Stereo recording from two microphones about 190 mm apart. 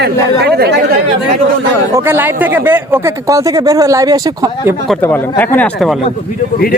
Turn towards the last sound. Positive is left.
turn(degrees=10)  # may be behind; listen again after turning